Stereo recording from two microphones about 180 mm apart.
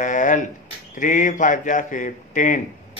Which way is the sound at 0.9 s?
45° left (ahead or behind).